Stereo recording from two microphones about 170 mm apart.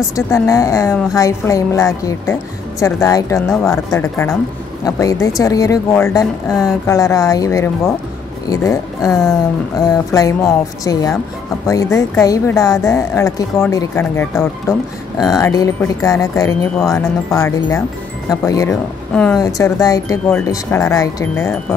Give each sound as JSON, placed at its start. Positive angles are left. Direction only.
{"t": 0.1, "sound": "a woman's voice", "side_deg": 20}